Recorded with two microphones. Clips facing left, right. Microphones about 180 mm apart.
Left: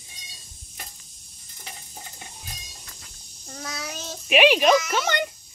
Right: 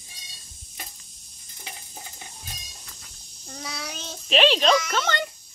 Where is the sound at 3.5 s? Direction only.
Centre (ahead or behind).